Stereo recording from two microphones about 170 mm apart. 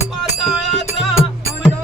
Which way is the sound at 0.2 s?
Centre (ahead or behind).